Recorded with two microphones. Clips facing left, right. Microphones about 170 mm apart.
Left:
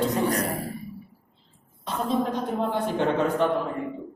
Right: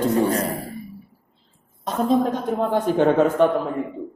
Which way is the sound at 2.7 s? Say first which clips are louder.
Right 9 dB; 45° right (ahead or behind).